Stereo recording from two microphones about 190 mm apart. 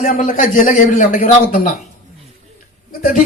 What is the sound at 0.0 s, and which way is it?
A man's voice, 45° left (ahead or behind).